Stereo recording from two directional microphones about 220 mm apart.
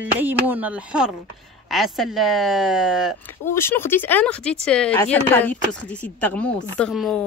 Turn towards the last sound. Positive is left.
turn(degrees=0)  # may be behind; listen again after turning